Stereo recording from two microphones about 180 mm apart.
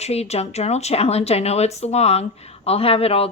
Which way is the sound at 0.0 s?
35° left (ahead or behind).